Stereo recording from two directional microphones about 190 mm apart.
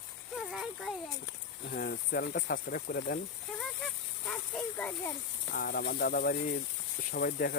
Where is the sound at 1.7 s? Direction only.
50° left (ahead or behind).